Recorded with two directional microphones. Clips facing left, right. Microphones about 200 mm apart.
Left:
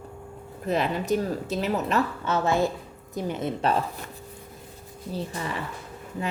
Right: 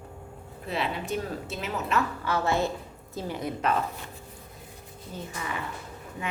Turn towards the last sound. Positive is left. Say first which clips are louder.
# left 4 dB
turn(degrees=30)  # may be behind; listen again after turning